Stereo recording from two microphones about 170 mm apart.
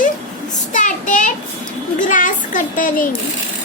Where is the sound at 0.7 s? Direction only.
50° left (ahead or behind).